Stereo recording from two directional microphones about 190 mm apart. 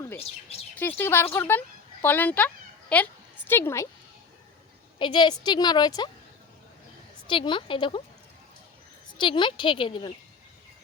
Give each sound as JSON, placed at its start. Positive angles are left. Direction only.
{"t": 0.8, "sound": "a woman's voice", "side_deg": 10}
{"t": 4.9, "sound": "a woman's voice", "side_deg": 25}
{"t": 7.3, "sound": "a woman's voice", "side_deg": 25}
{"t": 9.1, "sound": "a woman's voice", "side_deg": 25}